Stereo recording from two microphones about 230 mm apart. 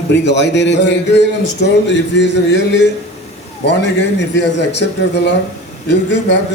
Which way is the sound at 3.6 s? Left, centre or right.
Left.